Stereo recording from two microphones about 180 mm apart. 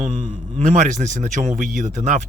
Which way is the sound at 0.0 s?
35° right (ahead or behind).